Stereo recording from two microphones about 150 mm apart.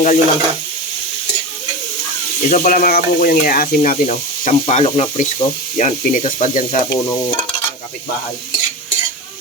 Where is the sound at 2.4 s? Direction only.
65° left (ahead or behind).